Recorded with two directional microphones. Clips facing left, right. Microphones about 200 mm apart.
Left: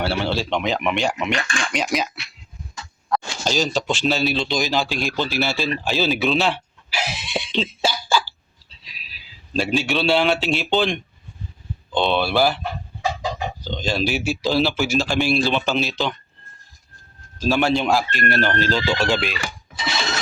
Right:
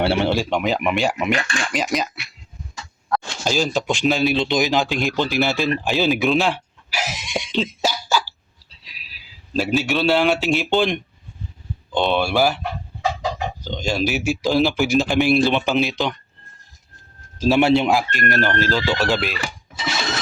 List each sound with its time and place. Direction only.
0.0 s speech: 20° right (ahead or behind); by 2.2 s centre (ahead or behind)
2.7 s a sound: 5° right (ahead or behind)
3.8 s speech: 10° right (ahead or behind)
5.8 s a sound: 15° right (ahead or behind)
9.0 s a man's voice: 10° right (ahead or behind)
13.7 s speech: 10° right (ahead or behind)
17.4 s a man's voice: 25° right (ahead or behind)
18.1 s speech: 45° right (ahead or behind)
18.6 s speech: 5° right (ahead or behind)